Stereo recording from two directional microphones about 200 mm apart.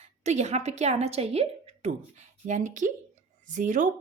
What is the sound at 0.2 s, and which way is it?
Speech, 35° right (ahead or behind).